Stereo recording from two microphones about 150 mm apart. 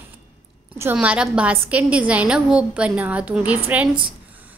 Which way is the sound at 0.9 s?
5° right (ahead or behind).